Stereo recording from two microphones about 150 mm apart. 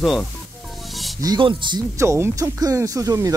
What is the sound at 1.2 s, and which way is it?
Speech, 30° right (ahead or behind).